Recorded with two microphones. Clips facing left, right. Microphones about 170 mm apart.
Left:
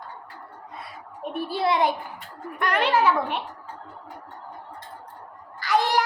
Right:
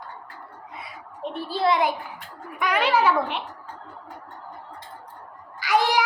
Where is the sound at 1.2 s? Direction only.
10° left (ahead or behind).